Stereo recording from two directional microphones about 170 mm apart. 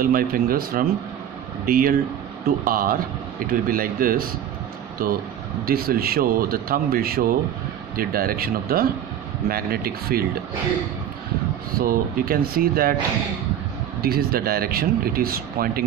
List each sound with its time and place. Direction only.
0.0 s speech: 55° right (ahead or behind)
11.8 s speech: 60° right (ahead or behind)
14.0 s speech: 65° right (ahead or behind)